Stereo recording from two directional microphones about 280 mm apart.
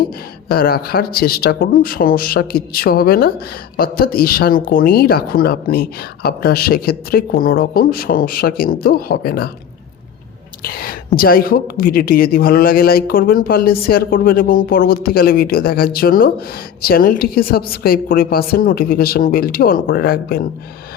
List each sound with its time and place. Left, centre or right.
0.4 s a woman's voice: left
10.6 s a woman's voice: left